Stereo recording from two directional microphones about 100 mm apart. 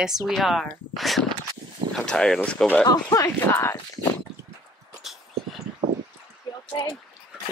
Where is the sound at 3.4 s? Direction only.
25° left (ahead or behind).